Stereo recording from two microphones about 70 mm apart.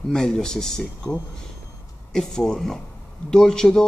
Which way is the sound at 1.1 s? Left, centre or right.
Left.